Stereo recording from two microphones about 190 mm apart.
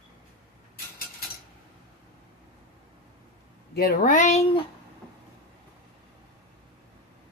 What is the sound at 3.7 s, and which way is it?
Speech, 50° left (ahead or behind).